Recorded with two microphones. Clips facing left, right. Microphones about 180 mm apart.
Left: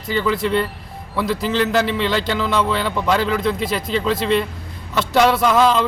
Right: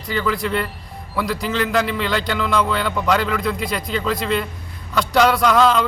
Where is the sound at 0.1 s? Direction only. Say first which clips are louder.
Left 2 dB; 30° left (ahead or behind).